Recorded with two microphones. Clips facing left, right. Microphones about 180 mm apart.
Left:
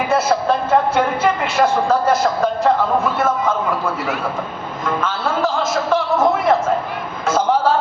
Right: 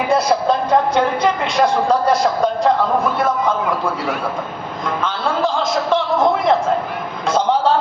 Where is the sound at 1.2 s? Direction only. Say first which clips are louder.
Even; 15° right (ahead or behind).